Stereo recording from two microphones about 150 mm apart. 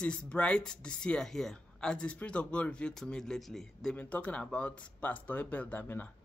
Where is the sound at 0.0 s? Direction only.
5° left (ahead or behind).